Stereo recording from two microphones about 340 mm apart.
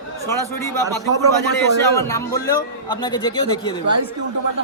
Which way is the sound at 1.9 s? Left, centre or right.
Centre.